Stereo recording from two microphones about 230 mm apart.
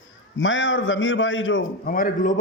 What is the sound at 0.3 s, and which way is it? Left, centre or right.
A man's voice, left.